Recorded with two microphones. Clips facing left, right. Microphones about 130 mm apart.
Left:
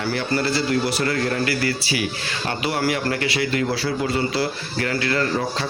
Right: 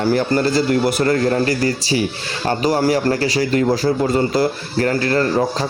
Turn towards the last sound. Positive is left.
turn(degrees=-40)  # may be behind; listen again after turning